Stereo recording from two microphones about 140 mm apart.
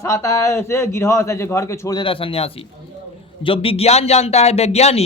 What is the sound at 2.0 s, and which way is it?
A man's voice, 40° left (ahead or behind).